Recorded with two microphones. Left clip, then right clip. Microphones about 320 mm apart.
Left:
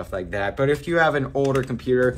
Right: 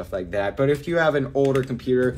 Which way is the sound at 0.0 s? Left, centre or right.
Left.